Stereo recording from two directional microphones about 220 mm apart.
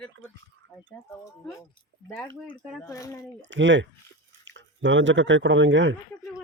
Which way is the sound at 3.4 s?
55° right (ahead or behind).